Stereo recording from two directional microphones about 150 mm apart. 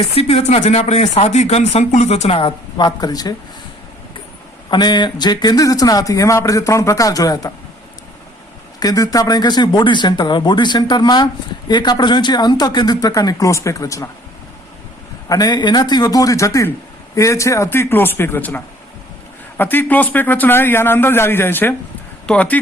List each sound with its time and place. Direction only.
0.1 s speech: 45° left (ahead or behind); by 3.3 s 25° left (ahead or behind)
4.7 s speech: 30° left (ahead or behind)
8.8 s speech: 25° left (ahead or behind)
15.3 s a man's voice: 25° left (ahead or behind); by 22.6 s 10° left (ahead or behind)